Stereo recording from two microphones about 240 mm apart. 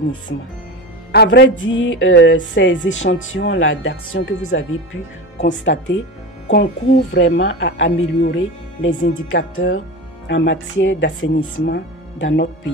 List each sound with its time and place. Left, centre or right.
1.1 s speech: left